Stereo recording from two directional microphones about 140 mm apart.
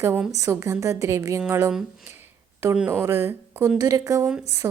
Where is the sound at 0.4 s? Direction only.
20° right (ahead or behind).